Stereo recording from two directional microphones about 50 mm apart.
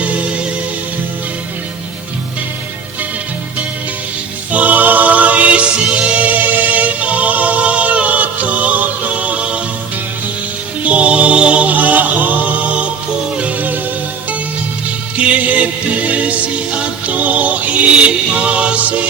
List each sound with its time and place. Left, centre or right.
4.5 s music: right
10.8 s music: right
15.3 s music: right